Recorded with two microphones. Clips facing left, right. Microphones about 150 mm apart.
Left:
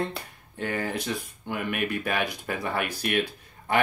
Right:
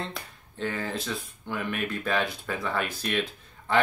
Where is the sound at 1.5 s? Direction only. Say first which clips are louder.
Left 1 dB; 55° left (ahead or behind).